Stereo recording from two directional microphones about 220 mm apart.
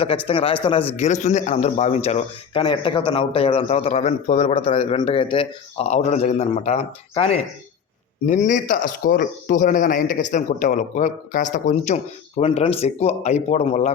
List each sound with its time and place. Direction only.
0.0 s a man's voice: 25° left (ahead or behind)
8.3 s a man's voice: 35° left (ahead or behind)